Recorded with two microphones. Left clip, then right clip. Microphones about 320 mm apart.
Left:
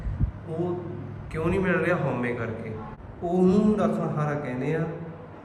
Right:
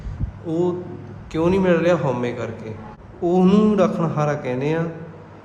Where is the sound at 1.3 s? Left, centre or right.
Centre.